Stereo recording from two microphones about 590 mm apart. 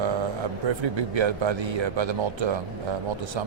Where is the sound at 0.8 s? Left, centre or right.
Right.